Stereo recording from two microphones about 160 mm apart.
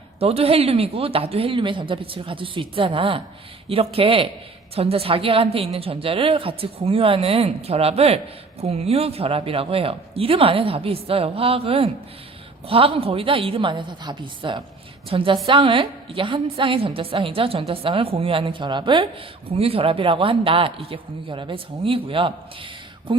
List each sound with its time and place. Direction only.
0.2 s speech: 40° right (ahead or behind)